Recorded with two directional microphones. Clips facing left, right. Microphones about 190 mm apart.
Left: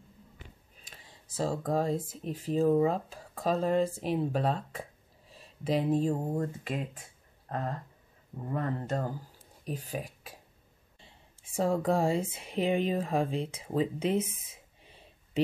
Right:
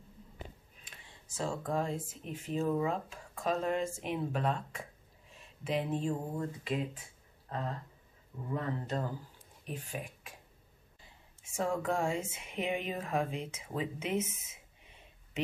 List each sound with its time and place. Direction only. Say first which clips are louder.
0.8 s speech: left 2 dB; 35° left (ahead or behind)
7.4 s a sound: left 3 dB; 50° left (ahead or behind)
8.5 s speech: left 3 dB; 45° left (ahead or behind)
9.7 s speech: left 5 dB; 35° left (ahead or behind)